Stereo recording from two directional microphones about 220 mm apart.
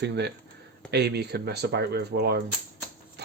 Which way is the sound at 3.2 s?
50° right (ahead or behind).